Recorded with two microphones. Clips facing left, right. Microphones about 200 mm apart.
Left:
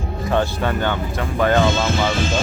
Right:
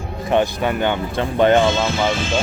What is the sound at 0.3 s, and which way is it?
Speech, 15° right (ahead or behind).